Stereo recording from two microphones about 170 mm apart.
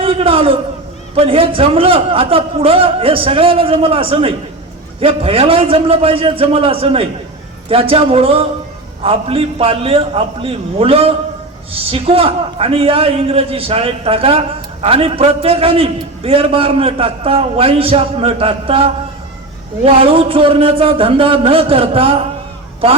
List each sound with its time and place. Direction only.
0.0 s a man's voice: 35° right (ahead or behind)